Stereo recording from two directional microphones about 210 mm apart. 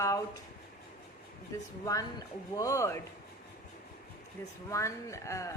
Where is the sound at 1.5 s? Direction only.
15° left (ahead or behind).